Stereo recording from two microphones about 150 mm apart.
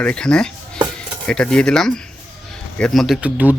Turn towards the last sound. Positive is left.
turn(degrees=-10)  # may be behind; listen again after turning